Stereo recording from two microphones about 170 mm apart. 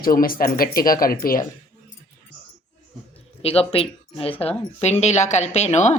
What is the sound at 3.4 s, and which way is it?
Speech, 35° left (ahead or behind).